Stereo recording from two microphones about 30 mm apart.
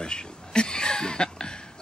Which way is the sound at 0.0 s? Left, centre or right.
Left.